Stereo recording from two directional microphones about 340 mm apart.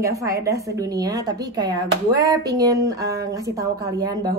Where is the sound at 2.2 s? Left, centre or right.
Centre.